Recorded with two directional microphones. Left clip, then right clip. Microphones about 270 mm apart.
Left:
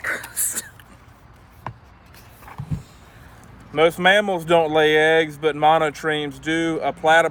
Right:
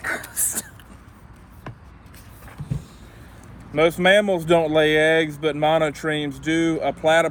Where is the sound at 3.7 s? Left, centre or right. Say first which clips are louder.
Left 1 dB; centre.